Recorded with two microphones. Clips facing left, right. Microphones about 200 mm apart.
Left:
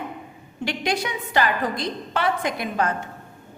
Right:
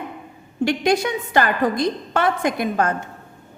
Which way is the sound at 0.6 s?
45° right (ahead or behind).